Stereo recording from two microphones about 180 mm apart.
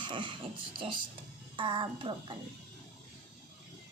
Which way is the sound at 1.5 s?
30° right (ahead or behind).